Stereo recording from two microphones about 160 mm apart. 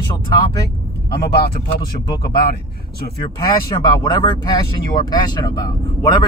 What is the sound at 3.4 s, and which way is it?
Speech, 25° left (ahead or behind).